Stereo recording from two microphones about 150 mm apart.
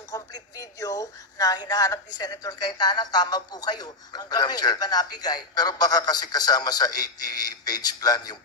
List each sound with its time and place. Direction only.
0.1 s speech: 25° left (ahead or behind)